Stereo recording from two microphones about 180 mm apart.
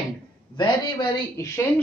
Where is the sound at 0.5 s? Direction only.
25° left (ahead or behind).